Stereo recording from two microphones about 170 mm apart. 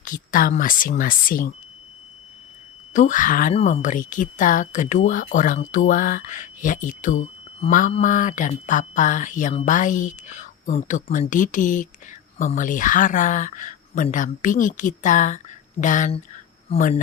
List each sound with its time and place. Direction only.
0.0 s speech: 50° left (ahead or behind)
2.9 s speech: 50° left (ahead or behind)
3.5 s speech: 40° left (ahead or behind)